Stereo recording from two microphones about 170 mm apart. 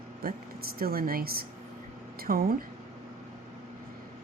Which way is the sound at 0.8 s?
60° right (ahead or behind).